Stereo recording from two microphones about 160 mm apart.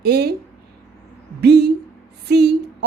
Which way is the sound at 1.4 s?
90° right.